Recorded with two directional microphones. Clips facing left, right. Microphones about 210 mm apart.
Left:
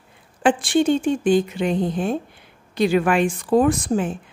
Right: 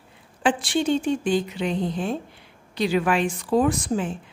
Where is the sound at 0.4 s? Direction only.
50° left (ahead or behind).